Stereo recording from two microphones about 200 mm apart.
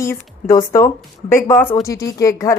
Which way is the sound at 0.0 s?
15° left (ahead or behind).